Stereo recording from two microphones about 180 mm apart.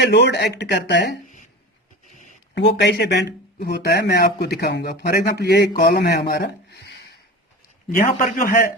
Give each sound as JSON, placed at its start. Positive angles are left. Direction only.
{"t": 0.0, "sound": "speech", "side_deg": 70}
{"t": 2.6, "sound": "speech", "side_deg": 70}
{"t": 7.9, "sound": "a man's voice", "side_deg": 50}